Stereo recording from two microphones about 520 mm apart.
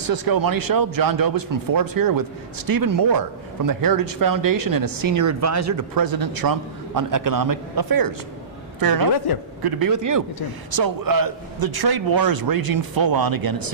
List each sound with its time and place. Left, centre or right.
0.0 s a man's voice: right